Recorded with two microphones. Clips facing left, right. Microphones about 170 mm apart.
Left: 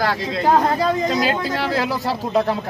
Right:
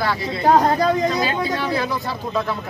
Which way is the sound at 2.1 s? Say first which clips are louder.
Left 5 dB; 40° left (ahead or behind).